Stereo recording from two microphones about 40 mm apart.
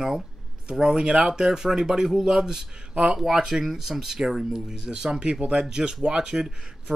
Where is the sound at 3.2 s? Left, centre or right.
Centre.